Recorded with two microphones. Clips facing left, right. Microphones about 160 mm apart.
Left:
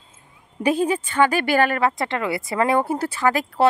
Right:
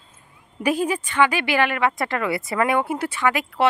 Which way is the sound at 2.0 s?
25° left (ahead or behind).